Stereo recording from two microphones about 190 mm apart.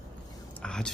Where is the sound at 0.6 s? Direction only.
5° left (ahead or behind).